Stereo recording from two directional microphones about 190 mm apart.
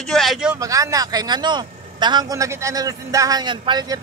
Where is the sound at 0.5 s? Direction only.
15° right (ahead or behind).